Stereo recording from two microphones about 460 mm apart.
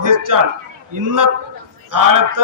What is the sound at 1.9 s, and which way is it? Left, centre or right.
Speech, right.